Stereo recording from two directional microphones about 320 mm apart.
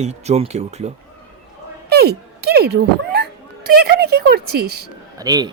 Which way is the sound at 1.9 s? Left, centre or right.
Right.